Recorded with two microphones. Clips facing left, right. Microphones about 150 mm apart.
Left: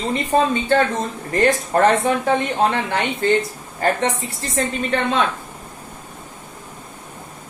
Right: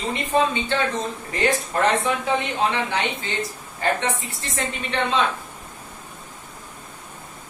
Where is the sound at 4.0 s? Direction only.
35° left (ahead or behind).